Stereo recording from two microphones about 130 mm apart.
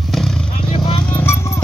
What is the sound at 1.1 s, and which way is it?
Music, 20° left (ahead or behind).